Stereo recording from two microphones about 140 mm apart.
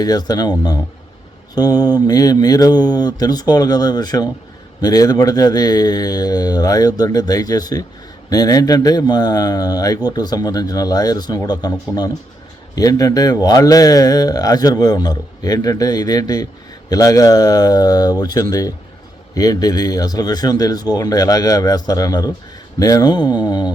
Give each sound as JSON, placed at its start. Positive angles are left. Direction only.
{"t": 0.0, "sound": "speech", "side_deg": 30}